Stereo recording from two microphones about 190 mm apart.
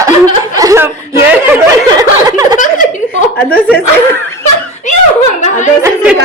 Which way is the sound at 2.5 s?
45° left (ahead or behind).